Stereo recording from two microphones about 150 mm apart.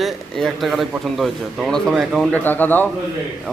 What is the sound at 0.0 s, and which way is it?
A man's voice, centre (ahead or behind).